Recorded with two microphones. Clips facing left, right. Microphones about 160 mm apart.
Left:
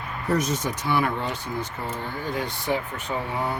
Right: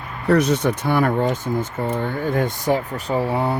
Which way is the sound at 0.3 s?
65° right (ahead or behind).